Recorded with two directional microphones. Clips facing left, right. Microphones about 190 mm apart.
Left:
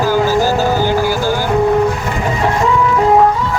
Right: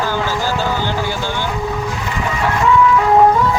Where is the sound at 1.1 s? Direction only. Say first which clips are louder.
Left 6 dB; 90° left.